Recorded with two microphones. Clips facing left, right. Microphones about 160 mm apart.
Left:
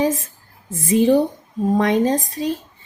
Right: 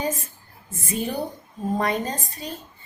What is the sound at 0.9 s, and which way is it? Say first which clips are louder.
Speech: left 12 dB; 90° left.